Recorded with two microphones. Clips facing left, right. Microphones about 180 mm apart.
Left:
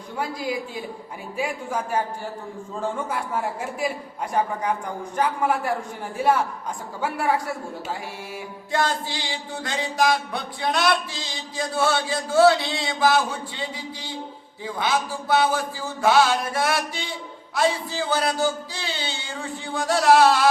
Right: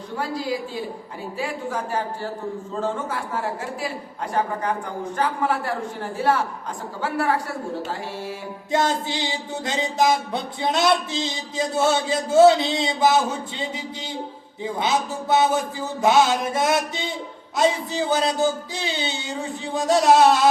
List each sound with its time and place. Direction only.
0.2 s speech: 15° left (ahead or behind)
5.1 s speech: 15° left (ahead or behind)
7.0 s speech: 10° left (ahead or behind)
8.7 s a sound: 20° right (ahead or behind)